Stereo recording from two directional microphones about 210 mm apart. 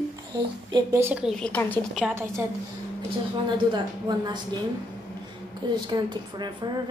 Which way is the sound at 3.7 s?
20° right (ahead or behind).